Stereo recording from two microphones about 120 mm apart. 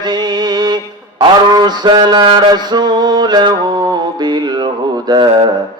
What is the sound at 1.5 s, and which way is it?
Mantra, 35° right (ahead or behind).